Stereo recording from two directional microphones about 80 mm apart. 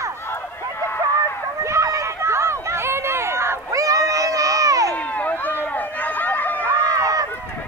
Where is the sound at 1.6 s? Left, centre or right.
Right.